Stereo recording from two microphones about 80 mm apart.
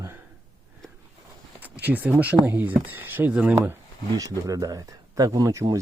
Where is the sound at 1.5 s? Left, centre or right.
Centre.